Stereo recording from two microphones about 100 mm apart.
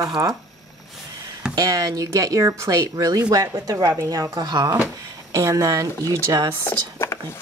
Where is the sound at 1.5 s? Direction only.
35° right (ahead or behind).